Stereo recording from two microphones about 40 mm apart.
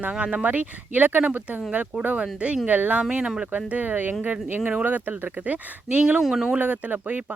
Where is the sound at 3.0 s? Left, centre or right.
Right.